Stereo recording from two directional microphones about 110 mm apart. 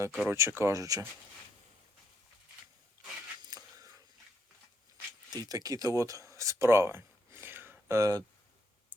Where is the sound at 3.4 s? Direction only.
35° right (ahead or behind).